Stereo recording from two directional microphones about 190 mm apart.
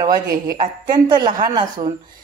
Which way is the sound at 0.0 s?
20° right (ahead or behind).